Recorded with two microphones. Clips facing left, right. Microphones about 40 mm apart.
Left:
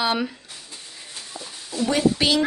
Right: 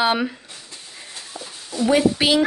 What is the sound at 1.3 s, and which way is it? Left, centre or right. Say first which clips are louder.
Speech: right 2 dB; centre.